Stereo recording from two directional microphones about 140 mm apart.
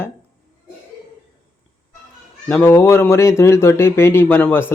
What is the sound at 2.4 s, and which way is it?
Speech, 15° left (ahead or behind).